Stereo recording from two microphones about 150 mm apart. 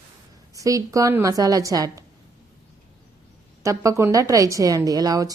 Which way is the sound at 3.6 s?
20° right (ahead or behind).